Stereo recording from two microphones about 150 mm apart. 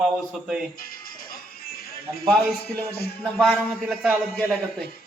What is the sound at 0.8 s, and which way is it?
Music, 75° left (ahead or behind).